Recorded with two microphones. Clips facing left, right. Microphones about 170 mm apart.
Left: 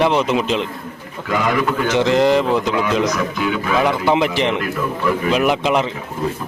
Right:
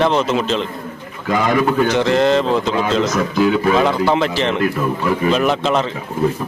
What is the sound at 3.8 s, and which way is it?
A man's voice, 15° left (ahead or behind).